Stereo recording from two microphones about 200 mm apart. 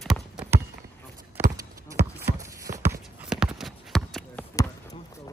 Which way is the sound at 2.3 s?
15° right (ahead or behind).